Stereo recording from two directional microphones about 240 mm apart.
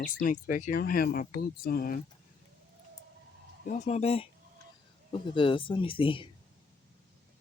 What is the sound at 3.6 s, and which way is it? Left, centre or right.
Speech, left.